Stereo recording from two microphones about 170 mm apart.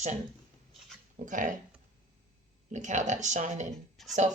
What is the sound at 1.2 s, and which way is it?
Speech, 50° right (ahead or behind).